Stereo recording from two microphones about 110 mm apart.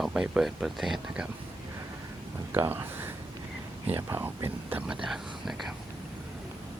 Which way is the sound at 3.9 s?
25° right (ahead or behind).